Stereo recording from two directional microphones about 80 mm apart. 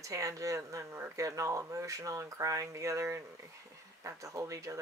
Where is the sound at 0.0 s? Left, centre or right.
Right.